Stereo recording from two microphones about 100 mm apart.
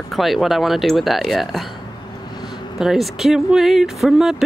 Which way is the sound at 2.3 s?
45° left (ahead or behind).